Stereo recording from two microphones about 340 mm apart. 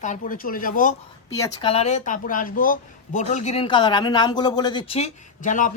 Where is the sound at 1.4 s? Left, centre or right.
Centre.